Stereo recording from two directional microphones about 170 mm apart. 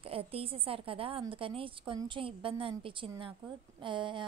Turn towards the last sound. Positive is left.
turn(degrees=-30)  # may be behind; listen again after turning